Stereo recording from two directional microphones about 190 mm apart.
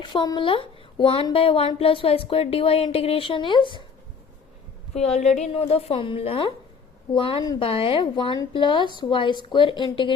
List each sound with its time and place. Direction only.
0.0 s speech: 25° left (ahead or behind)
4.9 s a woman's voice: 35° left (ahead or behind)